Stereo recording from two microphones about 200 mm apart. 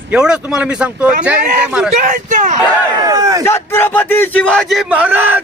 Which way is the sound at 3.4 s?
10° left (ahead or behind).